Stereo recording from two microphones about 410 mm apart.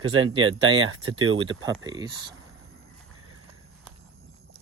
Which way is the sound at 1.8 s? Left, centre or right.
Centre.